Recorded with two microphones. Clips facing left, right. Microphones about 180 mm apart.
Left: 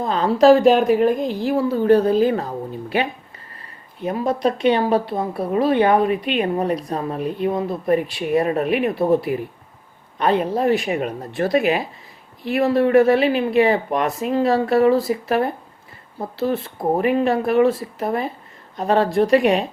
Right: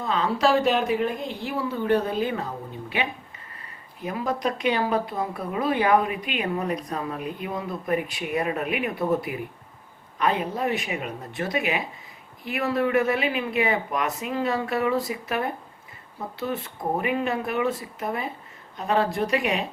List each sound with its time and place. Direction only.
0.0 s speech: 40° left (ahead or behind)
4.0 s speech: 30° left (ahead or behind)